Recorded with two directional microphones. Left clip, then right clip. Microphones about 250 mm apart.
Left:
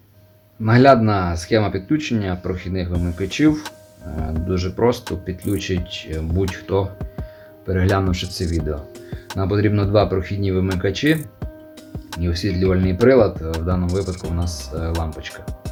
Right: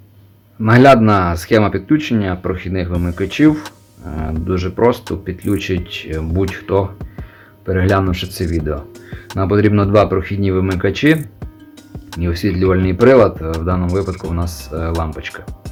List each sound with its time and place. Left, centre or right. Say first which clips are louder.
0.6 s speech: right 4 dB; centre
12.2 s speech: right 5 dB; centre